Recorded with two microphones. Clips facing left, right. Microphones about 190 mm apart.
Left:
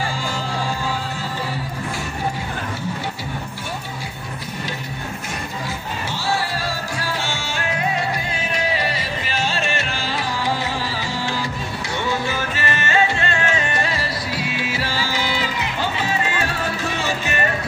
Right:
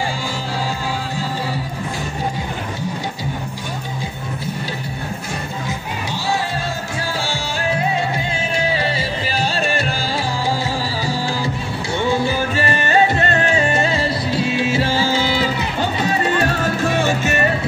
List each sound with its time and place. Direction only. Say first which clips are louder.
7.2 s music: right 4 dB; 30° right (ahead or behind)
11.1 s music: right 3 dB; 35° right (ahead or behind); by 17.3 s 50° right (ahead or behind)